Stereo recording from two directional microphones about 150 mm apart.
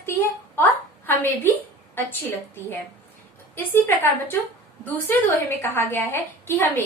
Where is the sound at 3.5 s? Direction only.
15° left (ahead or behind).